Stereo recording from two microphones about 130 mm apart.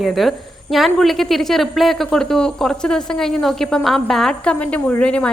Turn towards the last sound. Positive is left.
turn(degrees=10)  # may be behind; listen again after turning